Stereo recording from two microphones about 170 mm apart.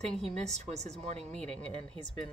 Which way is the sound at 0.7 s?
40° right (ahead or behind).